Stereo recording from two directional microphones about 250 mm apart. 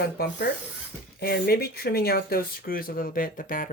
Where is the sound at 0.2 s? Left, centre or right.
Left.